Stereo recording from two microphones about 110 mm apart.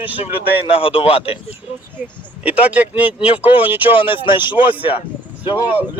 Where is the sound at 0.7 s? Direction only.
55° left (ahead or behind).